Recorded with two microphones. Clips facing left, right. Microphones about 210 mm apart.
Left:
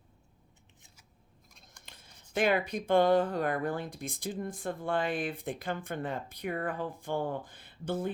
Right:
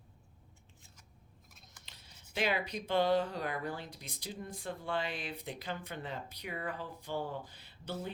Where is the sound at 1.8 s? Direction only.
50° left (ahead or behind).